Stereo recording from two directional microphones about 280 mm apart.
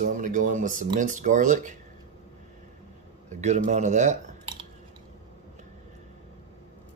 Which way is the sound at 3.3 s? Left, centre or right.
Right.